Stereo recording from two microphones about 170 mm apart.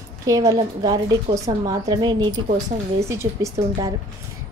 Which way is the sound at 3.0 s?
15° right (ahead or behind).